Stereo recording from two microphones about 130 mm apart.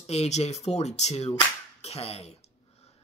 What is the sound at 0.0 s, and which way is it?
Speech, 55° left (ahead or behind).